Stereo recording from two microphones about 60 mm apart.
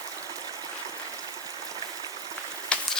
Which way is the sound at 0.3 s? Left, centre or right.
Right.